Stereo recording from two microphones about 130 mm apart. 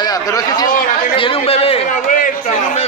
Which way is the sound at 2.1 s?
80° left.